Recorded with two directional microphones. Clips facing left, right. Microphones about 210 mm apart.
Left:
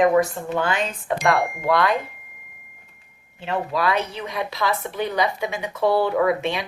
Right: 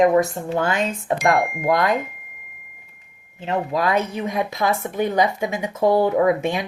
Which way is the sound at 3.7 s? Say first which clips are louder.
Right 2 dB; 45° right (ahead or behind).